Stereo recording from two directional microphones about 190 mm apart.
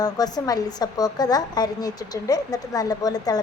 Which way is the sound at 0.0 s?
20° left (ahead or behind).